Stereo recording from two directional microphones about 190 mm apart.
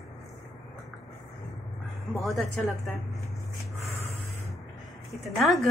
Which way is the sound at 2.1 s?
Centre (ahead or behind).